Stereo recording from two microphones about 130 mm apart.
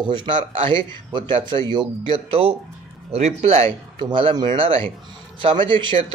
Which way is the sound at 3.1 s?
55° right (ahead or behind).